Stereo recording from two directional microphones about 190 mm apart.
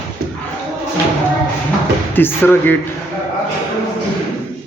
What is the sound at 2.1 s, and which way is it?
Speech, 10° left (ahead or behind).